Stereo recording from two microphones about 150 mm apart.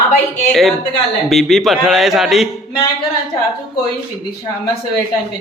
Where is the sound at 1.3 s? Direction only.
Centre (ahead or behind).